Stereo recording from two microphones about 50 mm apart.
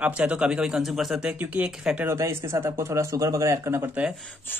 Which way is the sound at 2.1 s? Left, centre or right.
Right.